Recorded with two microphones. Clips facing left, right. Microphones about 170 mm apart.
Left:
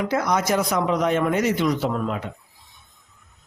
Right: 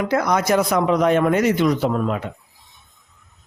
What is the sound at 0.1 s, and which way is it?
Speech, 60° right (ahead or behind).